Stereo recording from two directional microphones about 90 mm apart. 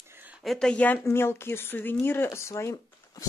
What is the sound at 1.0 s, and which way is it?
Speech, 25° left (ahead or behind).